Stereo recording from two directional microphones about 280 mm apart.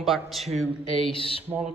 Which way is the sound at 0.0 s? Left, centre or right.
Centre.